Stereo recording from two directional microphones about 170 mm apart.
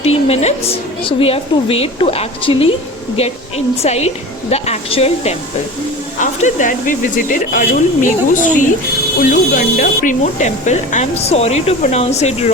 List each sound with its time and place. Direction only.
0.0 s speech: 35° left (ahead or behind)
3.8 s speech: 40° left (ahead or behind)